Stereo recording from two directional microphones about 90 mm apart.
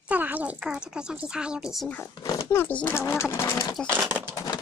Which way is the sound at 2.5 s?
20° left (ahead or behind).